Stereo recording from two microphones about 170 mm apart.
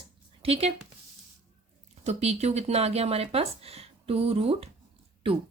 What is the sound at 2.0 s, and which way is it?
Speech, 40° right (ahead or behind).